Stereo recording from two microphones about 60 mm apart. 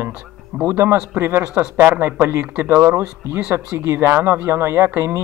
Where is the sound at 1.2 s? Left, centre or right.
Right.